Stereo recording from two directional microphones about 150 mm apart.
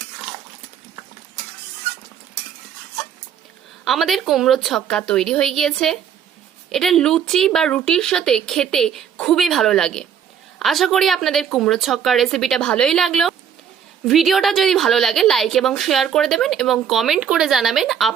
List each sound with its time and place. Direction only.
3.8 s a woman's voice: centre (ahead or behind)